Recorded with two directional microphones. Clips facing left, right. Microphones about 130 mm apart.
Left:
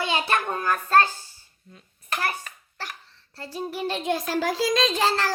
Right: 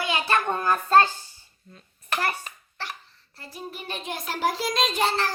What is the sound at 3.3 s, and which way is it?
A child's voice, 90° left.